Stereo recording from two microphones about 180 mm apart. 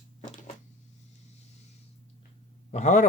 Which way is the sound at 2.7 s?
40° left (ahead or behind).